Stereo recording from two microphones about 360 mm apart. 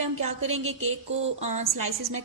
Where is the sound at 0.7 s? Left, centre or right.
Right.